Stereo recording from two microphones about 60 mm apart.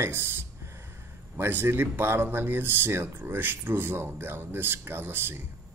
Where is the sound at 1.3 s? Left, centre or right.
Right.